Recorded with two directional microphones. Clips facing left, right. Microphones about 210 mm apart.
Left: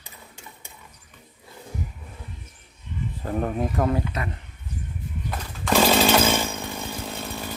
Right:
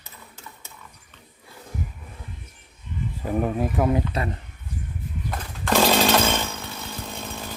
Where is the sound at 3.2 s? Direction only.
5° right (ahead or behind).